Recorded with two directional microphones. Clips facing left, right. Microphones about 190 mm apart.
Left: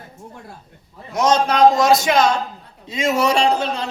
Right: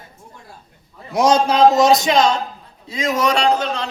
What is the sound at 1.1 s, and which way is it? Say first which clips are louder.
Speech: right 2 dB; 10° right (ahead or behind).